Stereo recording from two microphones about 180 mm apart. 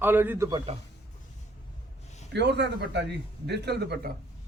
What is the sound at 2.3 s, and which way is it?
A man's voice, 75° right (ahead or behind).